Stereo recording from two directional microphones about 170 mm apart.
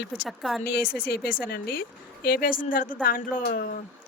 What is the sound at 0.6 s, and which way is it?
Speech, 60° left (ahead or behind).